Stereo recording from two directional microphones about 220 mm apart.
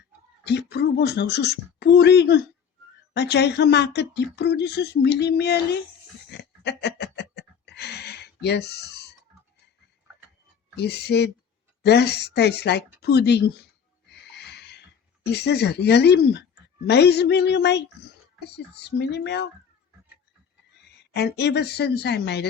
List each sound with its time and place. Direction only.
0.4 s speech: 50° left (ahead or behind)
6.3 s a sound: 50° left (ahead or behind)
10.8 s speech: 50° left (ahead or behind)
14.3 s a sound: 50° left (ahead or behind)
15.2 s speech: 50° left (ahead or behind)
21.1 s speech: 50° left (ahead or behind)